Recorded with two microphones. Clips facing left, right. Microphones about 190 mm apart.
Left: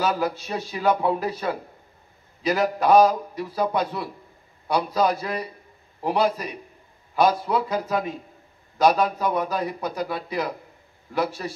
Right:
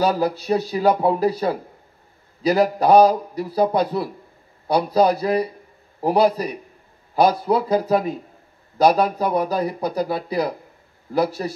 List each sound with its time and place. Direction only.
0.0 s speech: 35° right (ahead or behind)